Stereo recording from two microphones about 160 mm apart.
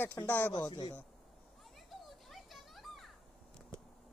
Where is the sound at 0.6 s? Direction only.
25° left (ahead or behind).